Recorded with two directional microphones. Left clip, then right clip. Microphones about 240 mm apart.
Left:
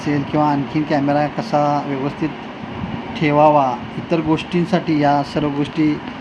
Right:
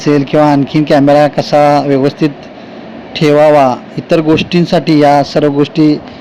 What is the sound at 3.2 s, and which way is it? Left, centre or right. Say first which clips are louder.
Speech: right 7 dB; right.